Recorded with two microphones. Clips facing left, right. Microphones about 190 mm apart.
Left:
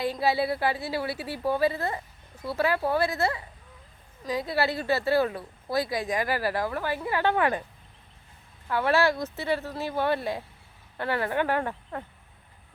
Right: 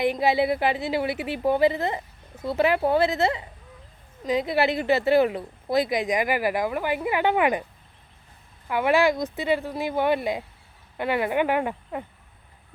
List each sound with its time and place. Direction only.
0.0 s a woman's voice: 20° right (ahead or behind)
8.6 s speech: 15° right (ahead or behind)